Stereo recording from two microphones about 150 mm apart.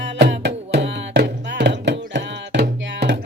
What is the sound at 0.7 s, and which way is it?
Music, 90° right.